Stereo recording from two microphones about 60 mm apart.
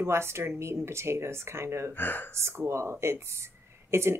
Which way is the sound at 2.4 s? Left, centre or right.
Right.